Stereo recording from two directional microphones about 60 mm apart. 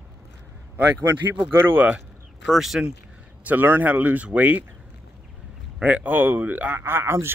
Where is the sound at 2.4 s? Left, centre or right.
Centre.